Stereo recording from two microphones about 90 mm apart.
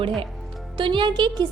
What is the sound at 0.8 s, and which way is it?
Speech, 65° right (ahead or behind).